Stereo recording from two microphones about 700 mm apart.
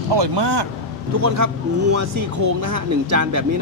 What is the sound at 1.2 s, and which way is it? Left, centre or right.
Speech, right.